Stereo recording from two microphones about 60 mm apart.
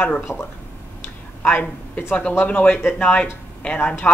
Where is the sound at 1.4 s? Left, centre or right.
Left.